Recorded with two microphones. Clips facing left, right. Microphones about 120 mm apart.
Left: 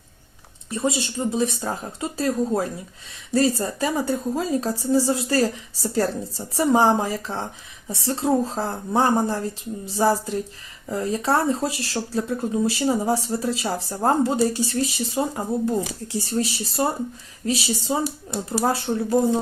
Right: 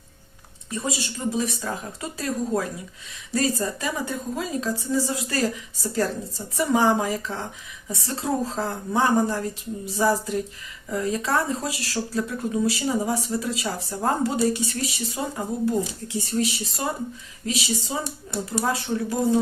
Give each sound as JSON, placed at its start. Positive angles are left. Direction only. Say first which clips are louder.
{"t": 0.7, "sound": "a woman's voice", "louder": "left 5 dB", "side_deg": 30}